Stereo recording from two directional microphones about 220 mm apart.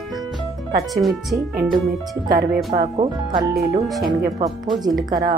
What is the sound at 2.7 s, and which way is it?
Speech, 30° right (ahead or behind).